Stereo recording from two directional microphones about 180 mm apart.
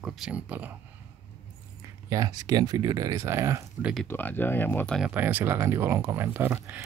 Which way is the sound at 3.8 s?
Centre (ahead or behind).